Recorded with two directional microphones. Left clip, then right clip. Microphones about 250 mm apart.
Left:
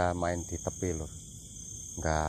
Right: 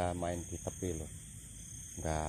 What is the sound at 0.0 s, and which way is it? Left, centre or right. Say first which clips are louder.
Speech: left 6 dB; centre.